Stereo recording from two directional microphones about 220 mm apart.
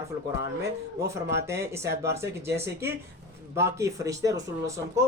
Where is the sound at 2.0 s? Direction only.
10° right (ahead or behind).